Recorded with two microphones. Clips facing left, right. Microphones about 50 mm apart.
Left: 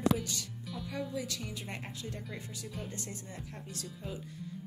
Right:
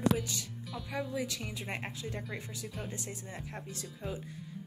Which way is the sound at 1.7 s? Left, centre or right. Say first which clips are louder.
Right 3 dB; right.